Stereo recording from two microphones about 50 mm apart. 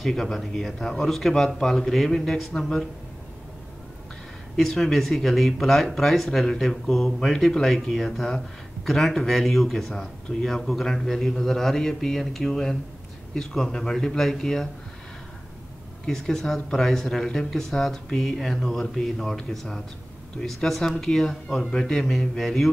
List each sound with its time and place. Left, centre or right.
0.0 s speech: centre
4.6 s speech: centre
16.1 s speech: centre